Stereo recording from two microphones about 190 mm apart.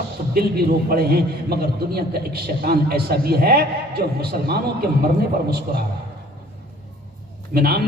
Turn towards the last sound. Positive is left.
turn(degrees=-55)  # may be behind; listen again after turning